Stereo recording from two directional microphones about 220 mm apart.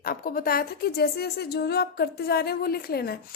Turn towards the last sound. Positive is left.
turn(degrees=45)  # may be behind; listen again after turning